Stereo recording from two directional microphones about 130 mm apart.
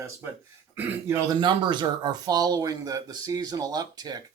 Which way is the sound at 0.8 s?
15° right (ahead or behind).